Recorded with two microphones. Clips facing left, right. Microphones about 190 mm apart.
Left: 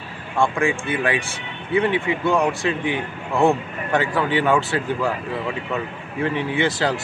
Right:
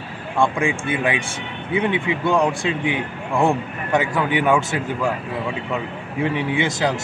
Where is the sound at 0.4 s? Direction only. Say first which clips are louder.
Even; 15° right (ahead or behind).